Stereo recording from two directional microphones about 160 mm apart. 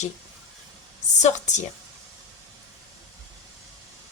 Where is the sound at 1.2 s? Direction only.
45° left (ahead or behind).